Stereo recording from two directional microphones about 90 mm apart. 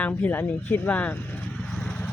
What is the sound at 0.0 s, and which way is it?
Speech, 15° left (ahead or behind).